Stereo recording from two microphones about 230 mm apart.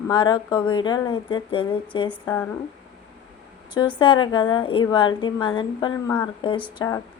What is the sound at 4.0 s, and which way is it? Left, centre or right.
Speech, centre.